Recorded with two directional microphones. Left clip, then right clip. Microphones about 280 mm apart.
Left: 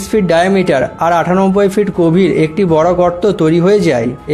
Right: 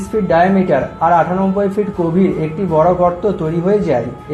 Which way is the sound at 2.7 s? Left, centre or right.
Left.